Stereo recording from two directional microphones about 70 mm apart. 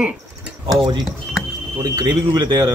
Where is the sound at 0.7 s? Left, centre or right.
Right.